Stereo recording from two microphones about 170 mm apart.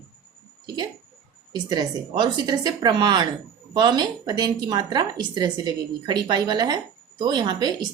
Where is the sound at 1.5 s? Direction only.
25° right (ahead or behind).